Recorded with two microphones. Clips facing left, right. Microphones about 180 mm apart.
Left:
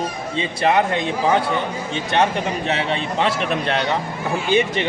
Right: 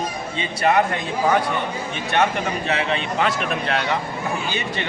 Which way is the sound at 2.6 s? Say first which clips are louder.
Left 1 dB; 30° left (ahead or behind).